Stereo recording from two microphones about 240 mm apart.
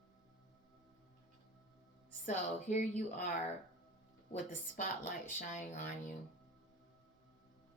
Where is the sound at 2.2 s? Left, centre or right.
Left.